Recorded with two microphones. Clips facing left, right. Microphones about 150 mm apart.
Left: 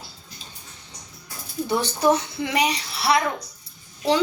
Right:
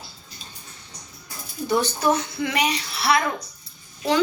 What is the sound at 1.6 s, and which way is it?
A woman's voice, 25° left (ahead or behind).